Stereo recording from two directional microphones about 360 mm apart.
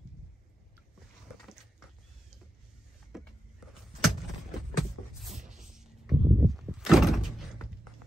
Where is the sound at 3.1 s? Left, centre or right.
Centre.